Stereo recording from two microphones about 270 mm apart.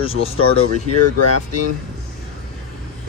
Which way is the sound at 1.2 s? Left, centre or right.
Left.